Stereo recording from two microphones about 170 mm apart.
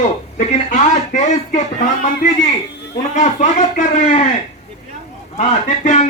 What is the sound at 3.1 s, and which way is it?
Speech, 45° left (ahead or behind).